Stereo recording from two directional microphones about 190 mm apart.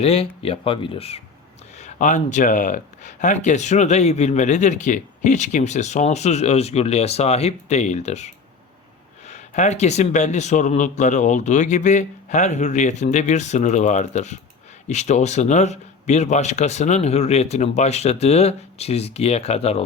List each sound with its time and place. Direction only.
0.0 s speech: 30° left (ahead or behind)